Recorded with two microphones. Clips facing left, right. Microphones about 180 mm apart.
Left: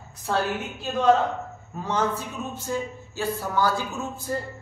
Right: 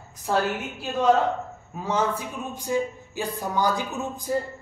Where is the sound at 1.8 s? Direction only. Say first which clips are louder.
Right 1 dB; 10° right (ahead or behind).